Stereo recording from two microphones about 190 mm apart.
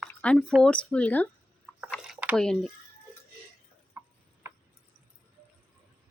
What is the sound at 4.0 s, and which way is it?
Tick-tock, 15° right (ahead or behind).